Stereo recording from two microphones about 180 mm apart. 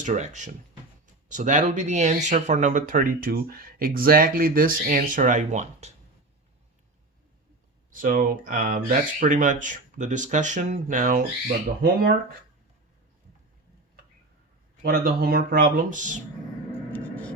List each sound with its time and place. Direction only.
0.0 s speech: 45° right (ahead or behind)
7.9 s speech: 50° right (ahead or behind)
14.8 s speech: 55° right (ahead or behind)
16.9 s a sound: 10° left (ahead or behind)